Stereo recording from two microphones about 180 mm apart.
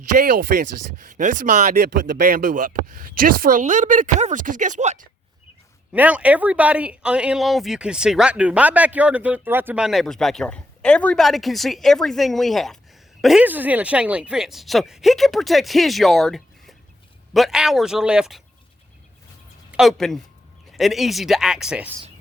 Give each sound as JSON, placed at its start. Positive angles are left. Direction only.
{"t": 0.3, "sound": "speech", "side_deg": -50}
{"t": 1.7, "sound": "speech", "side_deg": -65}
{"t": 5.9, "sound": "speech", "side_deg": -5}
{"t": 19.7, "sound": "speech", "side_deg": 0}